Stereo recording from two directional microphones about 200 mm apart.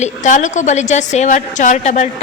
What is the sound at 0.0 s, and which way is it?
Speech, 40° left (ahead or behind).